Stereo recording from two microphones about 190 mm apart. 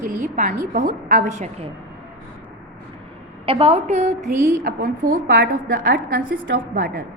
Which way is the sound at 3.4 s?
30° right (ahead or behind).